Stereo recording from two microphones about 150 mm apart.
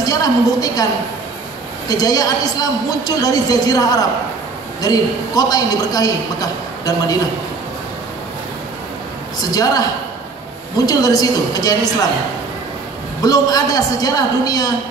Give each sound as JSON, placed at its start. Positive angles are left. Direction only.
{"t": 0.0, "sound": "a woman's voice", "side_deg": 25}
{"t": 1.9, "sound": "a man's voice", "side_deg": 25}
{"t": 9.4, "sound": "a man's voice", "side_deg": 25}
{"t": 10.9, "sound": "a man's voice", "side_deg": 25}
{"t": 13.2, "sound": "a man's voice", "side_deg": 25}